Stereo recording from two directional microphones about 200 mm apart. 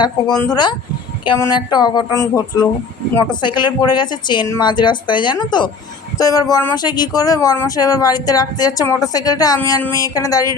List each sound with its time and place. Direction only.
0.5 s speech: 20° left (ahead or behind)